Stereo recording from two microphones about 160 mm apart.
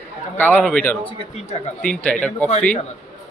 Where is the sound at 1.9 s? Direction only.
10° left (ahead or behind).